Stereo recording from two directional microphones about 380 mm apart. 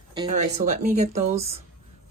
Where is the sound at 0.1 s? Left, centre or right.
Centre.